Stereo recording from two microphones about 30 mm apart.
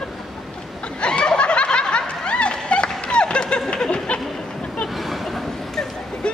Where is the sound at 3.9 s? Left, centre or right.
Left.